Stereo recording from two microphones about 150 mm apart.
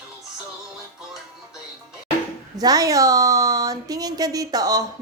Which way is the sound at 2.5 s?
25° right (ahead or behind).